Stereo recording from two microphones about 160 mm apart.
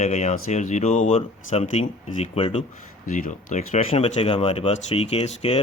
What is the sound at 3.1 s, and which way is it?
Speech, 50° left (ahead or behind).